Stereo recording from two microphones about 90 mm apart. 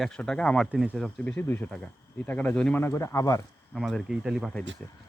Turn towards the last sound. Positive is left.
turn(degrees=-5)  # may be behind; listen again after turning